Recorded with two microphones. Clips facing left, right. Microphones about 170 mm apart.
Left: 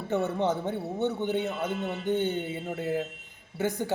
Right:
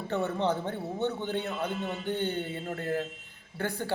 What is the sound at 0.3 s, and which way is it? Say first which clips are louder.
A man's voice: left 2 dB; 15° left (ahead or behind).